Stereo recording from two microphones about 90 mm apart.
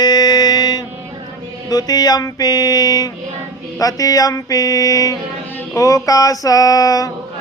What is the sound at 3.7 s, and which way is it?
Mantra, 40° left (ahead or behind).